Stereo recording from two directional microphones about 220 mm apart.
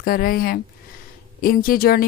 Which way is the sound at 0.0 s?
40° left (ahead or behind).